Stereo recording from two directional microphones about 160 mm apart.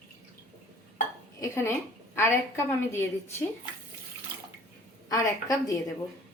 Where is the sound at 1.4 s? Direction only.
15° left (ahead or behind).